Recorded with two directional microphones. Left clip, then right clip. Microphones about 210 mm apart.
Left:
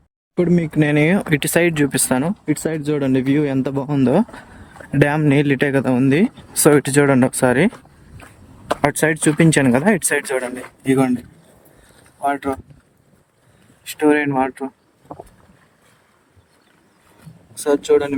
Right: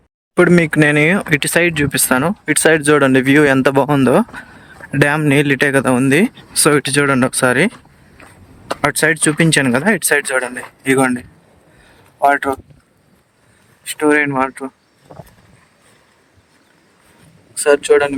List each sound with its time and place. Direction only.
0.3 s speech: 35° right (ahead or behind)
0.8 s speech: 10° left (ahead or behind)
2.5 s speech: 35° right (ahead or behind)
2.8 s speech: 5° left (ahead or behind)
8.8 s speech: 15° left (ahead or behind)
12.2 s speech: centre (ahead or behind)
13.8 s speech: 10° left (ahead or behind)
17.8 s speech: 30° right (ahead or behind)